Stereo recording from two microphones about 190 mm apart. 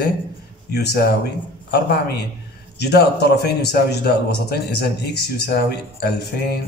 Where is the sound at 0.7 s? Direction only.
60° left (ahead or behind).